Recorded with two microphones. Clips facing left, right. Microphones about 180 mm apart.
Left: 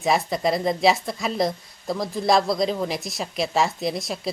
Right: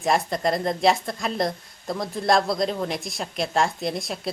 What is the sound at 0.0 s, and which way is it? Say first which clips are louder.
A woman's voice: left 1 dB; centre (ahead or behind).